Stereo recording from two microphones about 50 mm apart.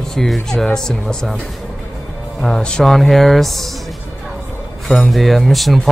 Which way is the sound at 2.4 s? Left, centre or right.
Centre.